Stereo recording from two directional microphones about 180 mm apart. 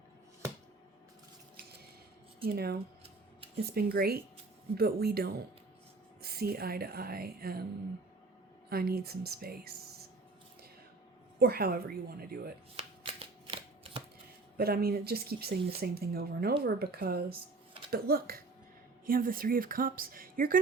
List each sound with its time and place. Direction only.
2.4 s speech: 30° right (ahead or behind)
3.6 s speech: 60° right (ahead or behind)
8.7 s speech: 60° right (ahead or behind)
11.3 s speech: 60° right (ahead or behind)
12.7 s shuffling cards: 30° right (ahead or behind)
14.6 s a woman's voice: 55° right (ahead or behind)